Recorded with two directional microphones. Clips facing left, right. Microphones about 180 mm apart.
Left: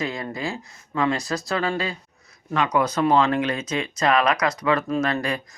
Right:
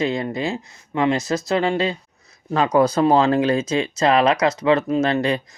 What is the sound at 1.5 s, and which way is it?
Speech, 25° right (ahead or behind).